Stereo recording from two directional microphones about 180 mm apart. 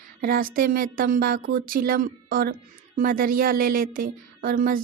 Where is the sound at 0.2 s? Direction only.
50° right (ahead or behind).